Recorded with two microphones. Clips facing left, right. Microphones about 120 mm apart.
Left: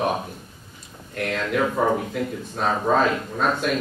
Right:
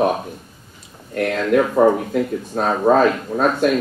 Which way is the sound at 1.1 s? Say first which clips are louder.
Right 8 dB; 45° right (ahead or behind).